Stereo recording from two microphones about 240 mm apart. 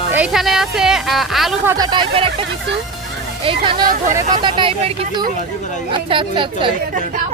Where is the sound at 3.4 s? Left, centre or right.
Centre.